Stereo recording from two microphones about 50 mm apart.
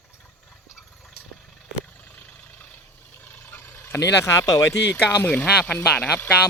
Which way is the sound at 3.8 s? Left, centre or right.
Left.